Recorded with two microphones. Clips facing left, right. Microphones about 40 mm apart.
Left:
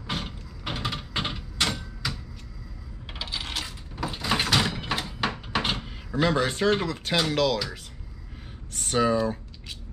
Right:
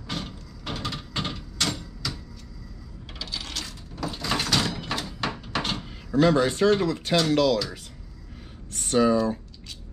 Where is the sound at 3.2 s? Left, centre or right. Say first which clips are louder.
Left 2 dB; left; by 7.2 s centre.